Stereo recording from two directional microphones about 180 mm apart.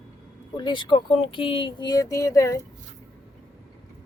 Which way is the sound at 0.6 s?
25° left (ahead or behind).